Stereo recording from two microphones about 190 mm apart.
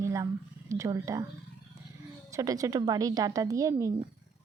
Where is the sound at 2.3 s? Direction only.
20° right (ahead or behind).